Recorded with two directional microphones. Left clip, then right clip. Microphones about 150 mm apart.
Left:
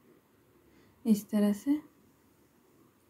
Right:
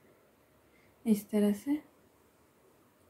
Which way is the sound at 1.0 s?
25° left (ahead or behind).